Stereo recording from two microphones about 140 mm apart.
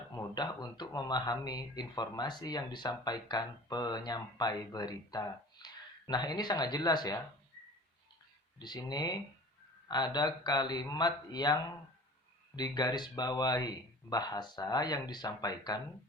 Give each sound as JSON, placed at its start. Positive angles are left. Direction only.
{"t": 0.2, "sound": "speech", "side_deg": 30}
{"t": 8.5, "sound": "speech", "side_deg": 30}